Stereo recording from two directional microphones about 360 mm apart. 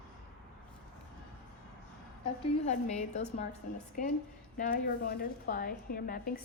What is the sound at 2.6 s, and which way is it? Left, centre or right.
Speech, centre.